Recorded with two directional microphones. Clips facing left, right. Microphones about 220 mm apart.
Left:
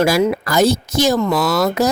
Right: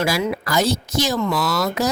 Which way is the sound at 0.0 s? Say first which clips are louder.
Left 6 dB; 45° left (ahead or behind).